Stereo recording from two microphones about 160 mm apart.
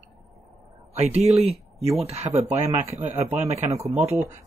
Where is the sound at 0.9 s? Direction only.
40° right (ahead or behind).